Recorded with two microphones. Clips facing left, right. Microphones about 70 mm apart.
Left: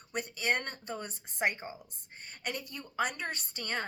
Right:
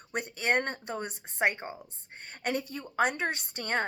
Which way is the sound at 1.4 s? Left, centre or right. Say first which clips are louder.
Right 4 dB; right.